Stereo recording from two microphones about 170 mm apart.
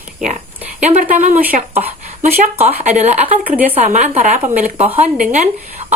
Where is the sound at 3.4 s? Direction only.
10° right (ahead or behind).